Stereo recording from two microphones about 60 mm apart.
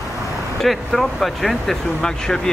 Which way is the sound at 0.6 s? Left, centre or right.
Centre.